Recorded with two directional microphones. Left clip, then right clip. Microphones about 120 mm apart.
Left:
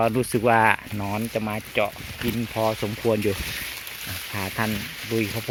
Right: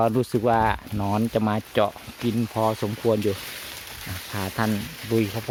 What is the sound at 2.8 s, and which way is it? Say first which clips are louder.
Speech: even; 5° right (ahead or behind).